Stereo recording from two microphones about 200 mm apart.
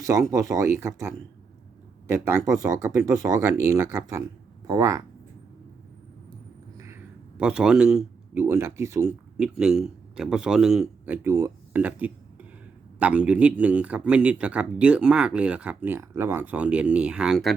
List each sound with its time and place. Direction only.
0.0 s speech: 15° right (ahead or behind)
6.7 s a man's voice: 15° right (ahead or behind)